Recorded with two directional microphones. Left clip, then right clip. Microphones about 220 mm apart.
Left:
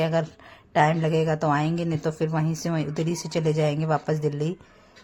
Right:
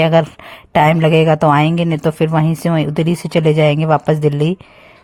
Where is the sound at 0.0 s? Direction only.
40° right (ahead or behind).